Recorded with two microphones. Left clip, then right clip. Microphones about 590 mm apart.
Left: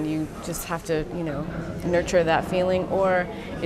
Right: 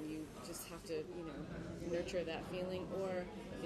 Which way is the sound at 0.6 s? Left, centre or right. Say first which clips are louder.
Left 19 dB; left.